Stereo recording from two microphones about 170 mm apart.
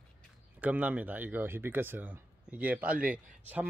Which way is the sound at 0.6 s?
10° right (ahead or behind).